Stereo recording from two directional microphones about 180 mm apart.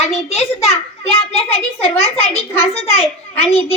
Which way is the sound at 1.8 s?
35° left (ahead or behind).